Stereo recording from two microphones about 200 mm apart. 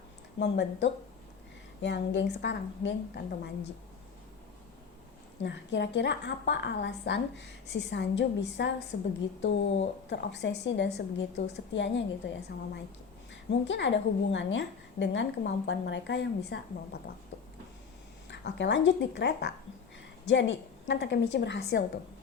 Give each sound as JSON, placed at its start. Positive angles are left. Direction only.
{"t": 0.3, "sound": "a woman's voice", "side_deg": 60}
{"t": 5.4, "sound": "a woman's voice", "side_deg": 65}
{"t": 13.7, "sound": "a woman's voice", "side_deg": 65}
{"t": 18.3, "sound": "a woman's voice", "side_deg": 60}